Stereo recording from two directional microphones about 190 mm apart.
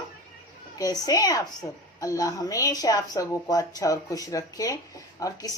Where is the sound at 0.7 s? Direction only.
20° left (ahead or behind).